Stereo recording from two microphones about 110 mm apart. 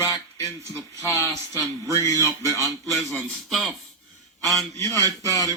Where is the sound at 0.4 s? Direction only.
25° right (ahead or behind).